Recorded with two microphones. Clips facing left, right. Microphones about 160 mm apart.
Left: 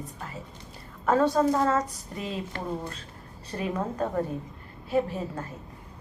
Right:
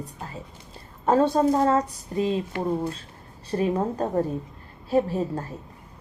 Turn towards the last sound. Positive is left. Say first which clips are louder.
# right 4 dB
turn(degrees=-35)  # may be behind; listen again after turning